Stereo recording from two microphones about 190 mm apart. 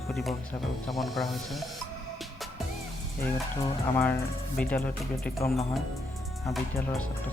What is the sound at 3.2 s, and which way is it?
Speech, 10° left (ahead or behind).